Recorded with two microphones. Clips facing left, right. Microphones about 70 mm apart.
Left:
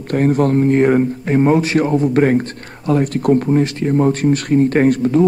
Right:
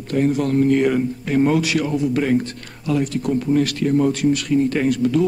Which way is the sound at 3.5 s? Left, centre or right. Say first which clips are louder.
Left 2 dB; left.